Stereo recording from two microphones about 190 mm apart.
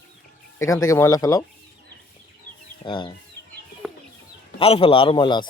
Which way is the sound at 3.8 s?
Centre (ahead or behind).